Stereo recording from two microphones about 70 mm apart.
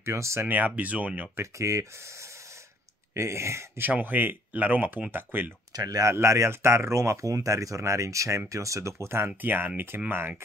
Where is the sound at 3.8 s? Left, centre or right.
Right.